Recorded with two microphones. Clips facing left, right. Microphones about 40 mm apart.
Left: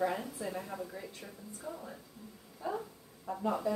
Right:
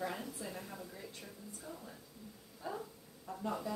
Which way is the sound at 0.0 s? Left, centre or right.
Centre.